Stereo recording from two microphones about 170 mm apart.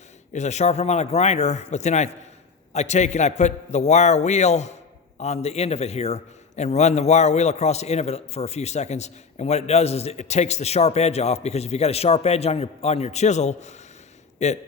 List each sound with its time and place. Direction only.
0.3 s a man's voice: 40° left (ahead or behind)